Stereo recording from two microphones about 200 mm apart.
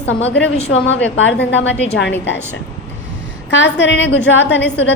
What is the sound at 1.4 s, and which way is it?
Speech, 60° left (ahead or behind).